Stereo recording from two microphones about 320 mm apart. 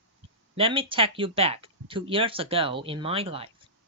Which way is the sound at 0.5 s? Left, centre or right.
Centre.